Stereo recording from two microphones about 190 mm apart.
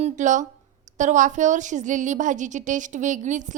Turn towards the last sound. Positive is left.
turn(degrees=-40)  # may be behind; listen again after turning